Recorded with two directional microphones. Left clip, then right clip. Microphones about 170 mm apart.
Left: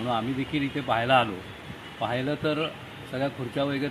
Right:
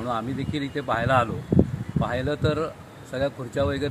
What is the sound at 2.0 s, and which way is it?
Speech, 15° right (ahead or behind).